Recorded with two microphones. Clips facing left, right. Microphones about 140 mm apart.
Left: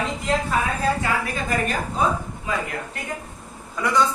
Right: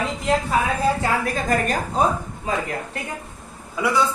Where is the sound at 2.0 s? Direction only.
40° right (ahead or behind).